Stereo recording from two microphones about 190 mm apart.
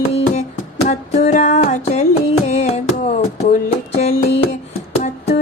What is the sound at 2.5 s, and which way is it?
Music, 35° left (ahead or behind).